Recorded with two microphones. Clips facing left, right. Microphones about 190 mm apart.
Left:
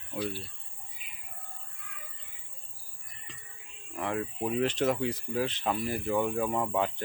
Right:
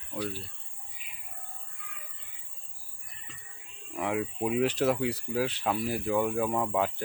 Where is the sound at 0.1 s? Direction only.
10° left (ahead or behind).